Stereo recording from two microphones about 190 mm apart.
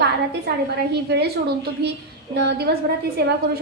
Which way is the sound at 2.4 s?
60° right (ahead or behind).